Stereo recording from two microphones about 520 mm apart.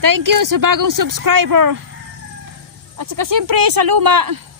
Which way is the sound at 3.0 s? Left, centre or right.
Right.